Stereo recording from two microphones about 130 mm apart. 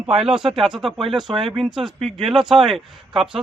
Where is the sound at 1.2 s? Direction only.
40° right (ahead or behind).